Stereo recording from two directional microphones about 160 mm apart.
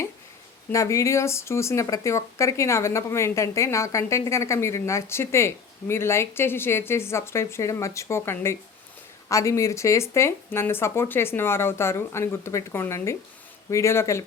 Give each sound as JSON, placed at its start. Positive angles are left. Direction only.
{"t": 0.7, "sound": "speech", "side_deg": 20}